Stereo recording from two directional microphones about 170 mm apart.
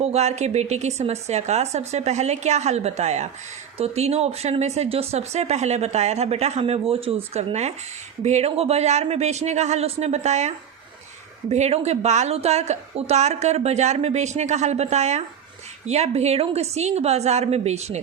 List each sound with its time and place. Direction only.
0.0 s a woman's voice: 40° right (ahead or behind)